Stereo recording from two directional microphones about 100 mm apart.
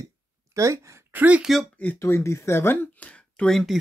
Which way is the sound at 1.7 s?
15° left (ahead or behind).